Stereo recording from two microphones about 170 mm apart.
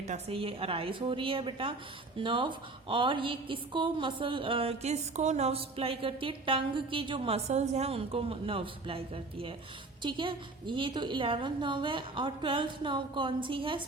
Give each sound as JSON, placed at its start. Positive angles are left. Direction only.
{"t": 0.1, "sound": "a woman's voice", "side_deg": -35}